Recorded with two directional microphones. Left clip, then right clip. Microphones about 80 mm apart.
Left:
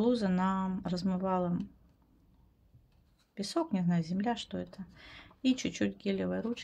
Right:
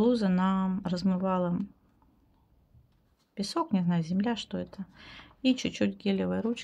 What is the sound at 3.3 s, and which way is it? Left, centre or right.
Speech, right.